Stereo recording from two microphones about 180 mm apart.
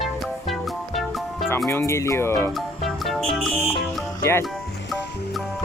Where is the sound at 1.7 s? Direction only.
15° left (ahead or behind).